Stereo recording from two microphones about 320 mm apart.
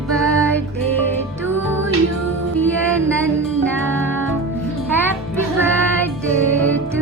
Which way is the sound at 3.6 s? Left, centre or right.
Centre.